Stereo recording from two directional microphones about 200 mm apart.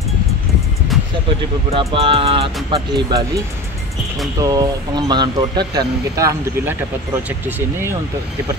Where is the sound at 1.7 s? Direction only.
30° right (ahead or behind).